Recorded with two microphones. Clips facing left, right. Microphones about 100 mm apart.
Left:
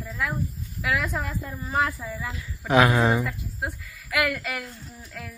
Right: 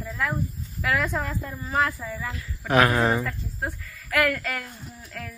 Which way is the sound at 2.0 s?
5° left (ahead or behind).